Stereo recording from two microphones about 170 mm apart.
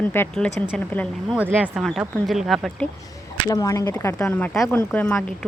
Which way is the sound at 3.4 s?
20° left (ahead or behind).